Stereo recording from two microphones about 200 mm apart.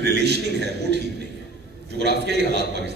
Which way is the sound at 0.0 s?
55° right (ahead or behind).